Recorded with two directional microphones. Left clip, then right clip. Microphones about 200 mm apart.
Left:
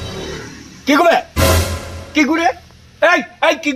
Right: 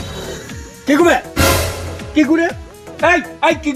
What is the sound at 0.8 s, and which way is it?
Speech, 35° left (ahead or behind).